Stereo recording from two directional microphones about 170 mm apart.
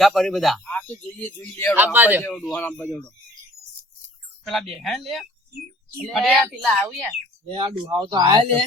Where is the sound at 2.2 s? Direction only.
5° left (ahead or behind).